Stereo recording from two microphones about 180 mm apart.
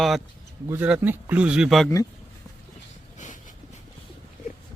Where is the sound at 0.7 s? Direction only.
10° right (ahead or behind).